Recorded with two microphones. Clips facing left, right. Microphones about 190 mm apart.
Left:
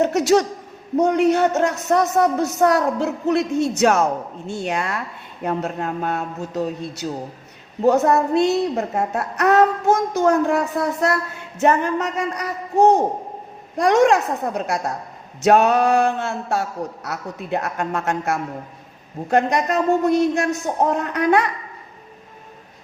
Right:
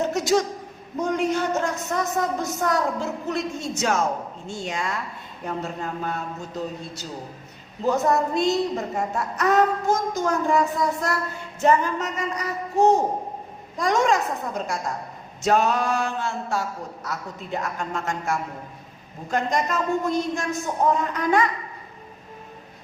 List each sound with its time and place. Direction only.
0.0 s a sound: 70° left (ahead or behind)
0.9 s a woman's voice: 65° left (ahead or behind)
13.7 s a woman's voice: 65° left (ahead or behind)